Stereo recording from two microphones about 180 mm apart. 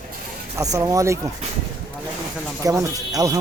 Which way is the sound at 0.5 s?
20° right (ahead or behind).